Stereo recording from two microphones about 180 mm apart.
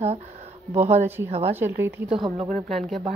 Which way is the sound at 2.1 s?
30° right (ahead or behind).